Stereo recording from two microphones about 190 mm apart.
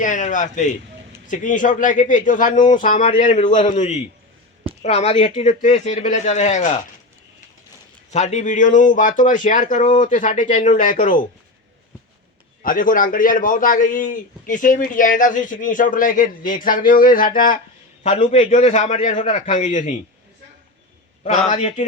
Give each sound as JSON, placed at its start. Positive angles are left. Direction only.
{"t": 0.0, "sound": "a man's voice", "side_deg": 40}
{"t": 8.1, "sound": "a man's voice", "side_deg": 40}
{"t": 12.6, "sound": "a man's voice", "side_deg": 45}
{"t": 21.3, "sound": "speech", "side_deg": 40}